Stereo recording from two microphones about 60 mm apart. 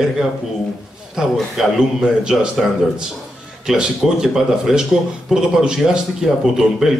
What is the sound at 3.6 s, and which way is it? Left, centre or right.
A man's voice, centre.